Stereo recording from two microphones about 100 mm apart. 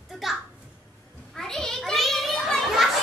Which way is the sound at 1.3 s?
5° left (ahead or behind).